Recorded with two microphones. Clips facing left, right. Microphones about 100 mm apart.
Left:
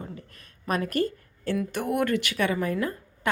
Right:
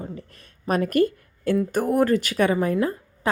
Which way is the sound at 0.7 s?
45° right (ahead or behind).